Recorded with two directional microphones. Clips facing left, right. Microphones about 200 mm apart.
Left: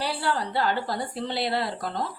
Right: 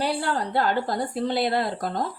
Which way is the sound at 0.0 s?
50° right (ahead or behind).